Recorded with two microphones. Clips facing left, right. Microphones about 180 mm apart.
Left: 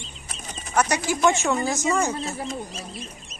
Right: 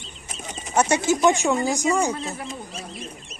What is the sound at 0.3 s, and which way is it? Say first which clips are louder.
Speech: right 4 dB; 25° right (ahead or behind).